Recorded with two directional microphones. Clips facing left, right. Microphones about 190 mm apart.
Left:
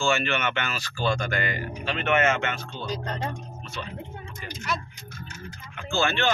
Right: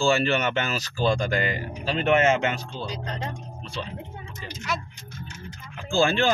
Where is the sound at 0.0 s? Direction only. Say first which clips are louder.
Right 3 dB; 35° right (ahead or behind).